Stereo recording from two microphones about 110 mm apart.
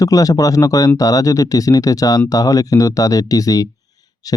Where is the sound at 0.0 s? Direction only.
35° left (ahead or behind).